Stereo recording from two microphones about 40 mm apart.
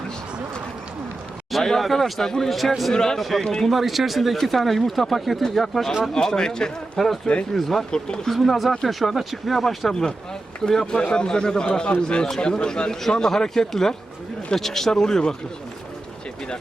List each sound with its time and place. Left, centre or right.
1.5 s speech: centre
2.5 s speech: centre
2.9 s speech: centre
3.2 s speech: centre
3.4 s speech: centre
3.7 s speech: centre
6.3 s speech: centre
7.5 s speech: centre
7.9 s speech: centre
8.3 s speech: centre
9.9 s a man's voice: centre